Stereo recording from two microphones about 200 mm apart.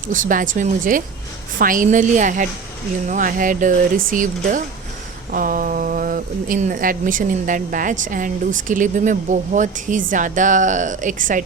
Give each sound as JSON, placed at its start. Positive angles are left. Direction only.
{"t": 0.1, "sound": "speech", "side_deg": -40}